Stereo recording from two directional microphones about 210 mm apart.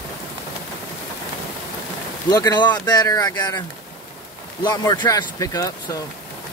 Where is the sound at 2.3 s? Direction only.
20° left (ahead or behind).